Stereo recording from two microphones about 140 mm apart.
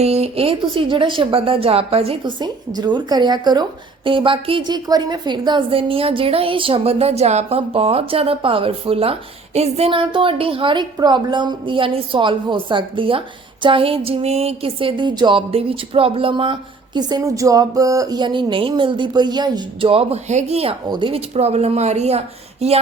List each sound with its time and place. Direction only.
0.0 s a woman's voice: 50° right (ahead or behind)
2.4 s a woman's voice: 30° right (ahead or behind); by 20.7 s 45° right (ahead or behind)
20.8 s a woman's voice: 35° right (ahead or behind)
21.3 s speech: 50° right (ahead or behind)